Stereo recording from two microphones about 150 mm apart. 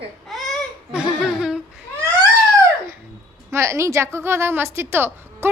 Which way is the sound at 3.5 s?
20° right (ahead or behind).